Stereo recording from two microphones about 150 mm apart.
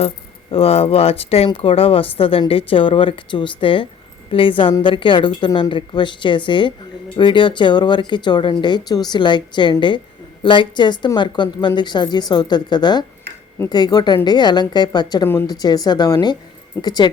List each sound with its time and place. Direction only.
0.5 s a woman's voice: 40° left (ahead or behind)